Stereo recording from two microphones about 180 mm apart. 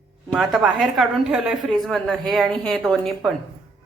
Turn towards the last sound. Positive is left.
turn(degrees=0)  # may be behind; listen again after turning